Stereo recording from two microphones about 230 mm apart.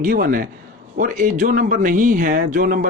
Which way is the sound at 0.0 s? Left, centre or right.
Right.